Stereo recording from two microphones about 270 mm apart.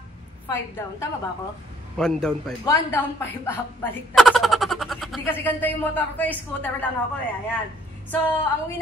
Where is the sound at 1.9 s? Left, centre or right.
Centre.